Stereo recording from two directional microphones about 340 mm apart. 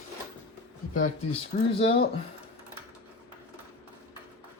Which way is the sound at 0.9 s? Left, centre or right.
Left.